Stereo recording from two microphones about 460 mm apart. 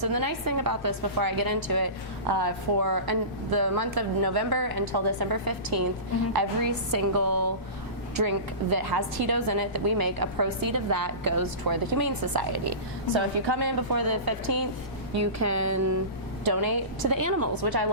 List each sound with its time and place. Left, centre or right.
0.0 s a woman's voice: right
15.1 s a woman's voice: right
16.4 s a woman's voice: right